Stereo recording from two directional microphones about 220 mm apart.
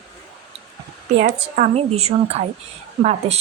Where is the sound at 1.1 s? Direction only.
30° right (ahead or behind).